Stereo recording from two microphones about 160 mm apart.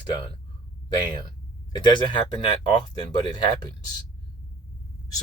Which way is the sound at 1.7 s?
30° left (ahead or behind).